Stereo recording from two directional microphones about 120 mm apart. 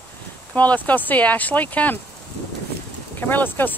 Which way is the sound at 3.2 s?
15° left (ahead or behind).